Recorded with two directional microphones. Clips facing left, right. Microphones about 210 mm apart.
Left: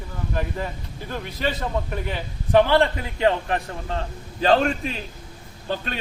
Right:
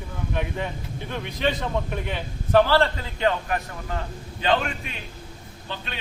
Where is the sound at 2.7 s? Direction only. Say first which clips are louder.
Left 2 dB; 15° left (ahead or behind).